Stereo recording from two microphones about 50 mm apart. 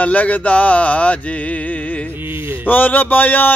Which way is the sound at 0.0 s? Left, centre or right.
Left.